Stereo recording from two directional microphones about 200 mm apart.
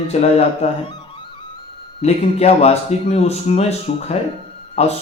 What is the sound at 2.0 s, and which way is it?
Speech, 30° left (ahead or behind).